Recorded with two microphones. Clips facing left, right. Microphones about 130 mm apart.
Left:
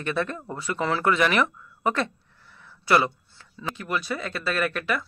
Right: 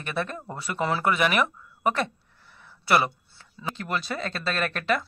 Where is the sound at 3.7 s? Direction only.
30° right (ahead or behind).